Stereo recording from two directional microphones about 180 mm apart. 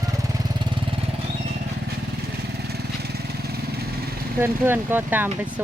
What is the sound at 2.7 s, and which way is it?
Lawn mower, 60° right (ahead or behind).